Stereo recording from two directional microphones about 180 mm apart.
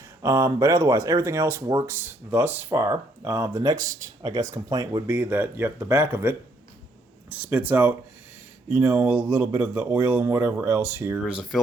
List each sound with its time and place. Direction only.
0.2 s speech: 15° right (ahead or behind)
5.0 s speech: 10° right (ahead or behind)